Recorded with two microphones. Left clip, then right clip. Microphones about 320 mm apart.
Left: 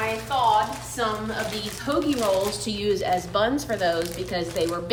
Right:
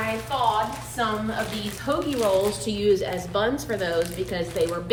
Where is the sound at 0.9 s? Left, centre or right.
Centre.